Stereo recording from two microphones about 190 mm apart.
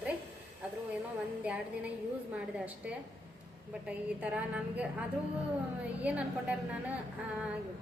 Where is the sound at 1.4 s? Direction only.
5° right (ahead or behind).